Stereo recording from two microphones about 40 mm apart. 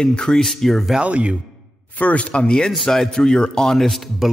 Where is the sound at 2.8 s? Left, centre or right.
Centre.